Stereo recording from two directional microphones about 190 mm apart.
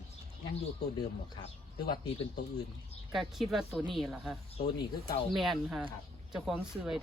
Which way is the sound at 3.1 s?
Centre (ahead or behind).